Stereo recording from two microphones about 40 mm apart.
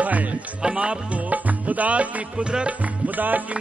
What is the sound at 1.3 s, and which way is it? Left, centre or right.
Music, right.